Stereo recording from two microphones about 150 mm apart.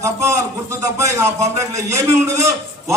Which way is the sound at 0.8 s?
20° right (ahead or behind).